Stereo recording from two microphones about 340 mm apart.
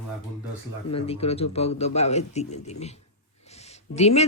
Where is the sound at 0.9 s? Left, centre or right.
Centre.